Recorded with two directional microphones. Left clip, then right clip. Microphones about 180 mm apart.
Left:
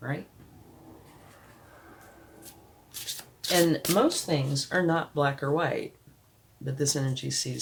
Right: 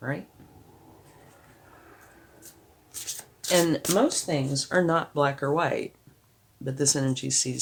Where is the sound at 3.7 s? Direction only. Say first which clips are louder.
Right 1 dB; 50° right (ahead or behind).